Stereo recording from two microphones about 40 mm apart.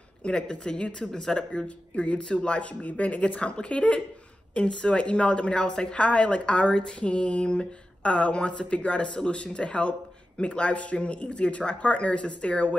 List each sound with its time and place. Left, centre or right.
0.2 s a woman's voice: left